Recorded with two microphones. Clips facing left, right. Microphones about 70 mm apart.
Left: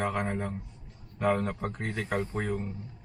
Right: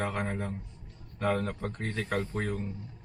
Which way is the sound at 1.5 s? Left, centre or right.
Left.